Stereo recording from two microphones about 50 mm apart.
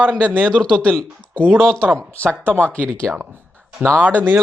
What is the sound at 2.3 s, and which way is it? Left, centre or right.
Speech, right.